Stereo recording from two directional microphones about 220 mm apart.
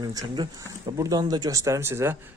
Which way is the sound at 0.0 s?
15° right (ahead or behind).